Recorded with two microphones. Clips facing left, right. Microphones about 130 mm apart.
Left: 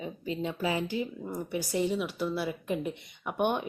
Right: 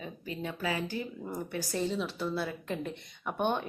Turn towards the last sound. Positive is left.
turn(degrees=15)  # may be behind; listen again after turning